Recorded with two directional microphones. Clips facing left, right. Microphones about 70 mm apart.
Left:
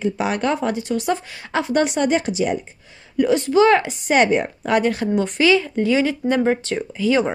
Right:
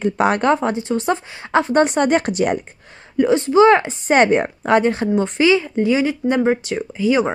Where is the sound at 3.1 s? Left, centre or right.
Right.